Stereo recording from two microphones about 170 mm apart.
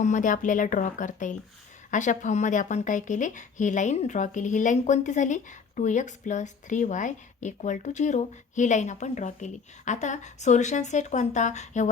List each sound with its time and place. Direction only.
0.0 s a woman's voice: 45° left (ahead or behind)